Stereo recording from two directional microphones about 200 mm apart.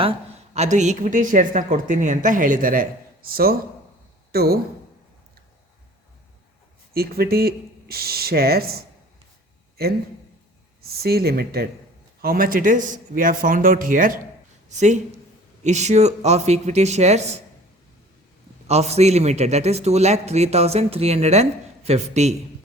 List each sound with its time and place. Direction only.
0.5 s a man's voice: 35° right (ahead or behind); by 4.5 s 50° right (ahead or behind)
6.9 s speech: 50° right (ahead or behind)
10.8 s a man's voice: 50° right (ahead or behind); by 17.4 s 35° right (ahead or behind)
18.7 s a man's voice: 30° right (ahead or behind)